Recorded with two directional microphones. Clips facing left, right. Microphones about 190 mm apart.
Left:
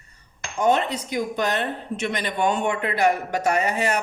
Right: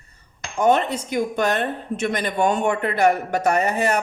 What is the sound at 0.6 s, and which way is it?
Speech, 50° right (ahead or behind).